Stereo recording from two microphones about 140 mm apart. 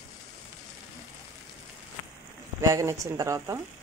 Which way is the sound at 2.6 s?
20° right (ahead or behind).